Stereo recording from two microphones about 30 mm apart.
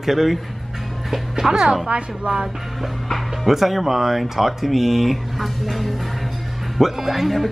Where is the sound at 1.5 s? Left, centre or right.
Right.